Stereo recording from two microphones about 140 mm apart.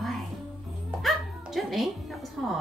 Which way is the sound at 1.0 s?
Centre (ahead or behind).